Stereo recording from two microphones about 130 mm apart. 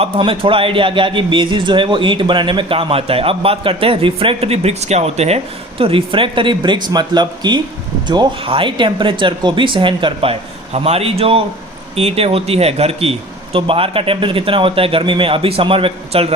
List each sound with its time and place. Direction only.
0.2 s a man's voice: 45° right (ahead or behind)
5.8 s a man's voice: 45° right (ahead or behind)